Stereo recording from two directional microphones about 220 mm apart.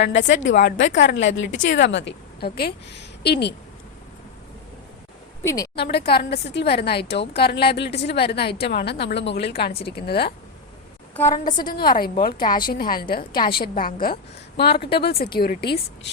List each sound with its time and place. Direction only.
0.3 s a woman's voice: 55° left (ahead or behind)
5.4 s a woman's voice: 10° left (ahead or behind)
5.7 s a woman's voice: 50° left (ahead or behind)
11.2 s a woman's voice: 15° left (ahead or behind)
11.9 s a woman's voice: 40° left (ahead or behind)